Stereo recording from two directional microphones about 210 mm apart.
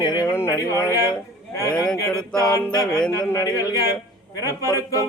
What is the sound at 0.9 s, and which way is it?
A man's voice, 15° left (ahead or behind).